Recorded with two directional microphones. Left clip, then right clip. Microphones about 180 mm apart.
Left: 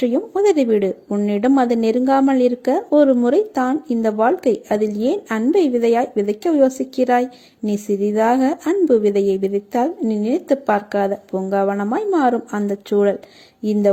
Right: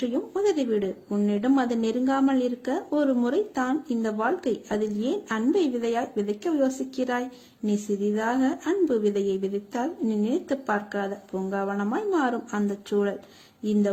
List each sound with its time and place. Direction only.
0.0 s speech: 35° left (ahead or behind)